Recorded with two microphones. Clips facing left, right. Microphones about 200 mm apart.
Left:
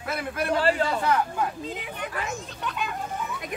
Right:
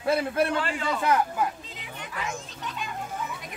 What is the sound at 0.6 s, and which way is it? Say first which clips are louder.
Speech: left 5 dB; 40° left (ahead or behind).